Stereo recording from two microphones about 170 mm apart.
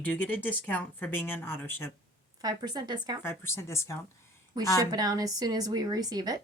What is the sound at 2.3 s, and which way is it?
Speech, 25° right (ahead or behind).